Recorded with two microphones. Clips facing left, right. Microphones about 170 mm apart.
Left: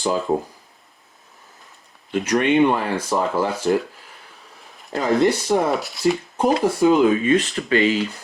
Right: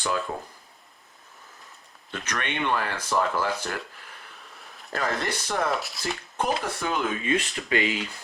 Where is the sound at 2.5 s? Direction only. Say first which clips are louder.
Left 8 dB; 25° left (ahead or behind).